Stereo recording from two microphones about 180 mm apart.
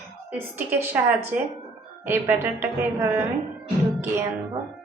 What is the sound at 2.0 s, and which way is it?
A woman's voice, 15° right (ahead or behind).